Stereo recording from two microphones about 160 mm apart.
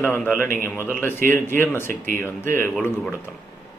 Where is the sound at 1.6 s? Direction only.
15° left (ahead or behind).